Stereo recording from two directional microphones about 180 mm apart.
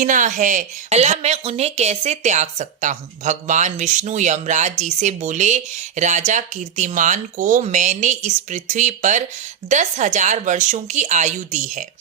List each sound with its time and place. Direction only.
0.0 s a woman's voice: 45° right (ahead or behind)